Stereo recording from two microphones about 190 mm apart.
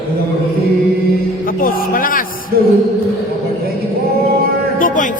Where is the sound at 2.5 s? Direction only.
55° right (ahead or behind).